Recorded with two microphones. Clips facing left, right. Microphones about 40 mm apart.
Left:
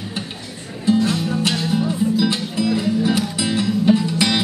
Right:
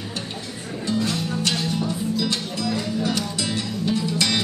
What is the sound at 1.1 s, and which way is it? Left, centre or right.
Music, centre.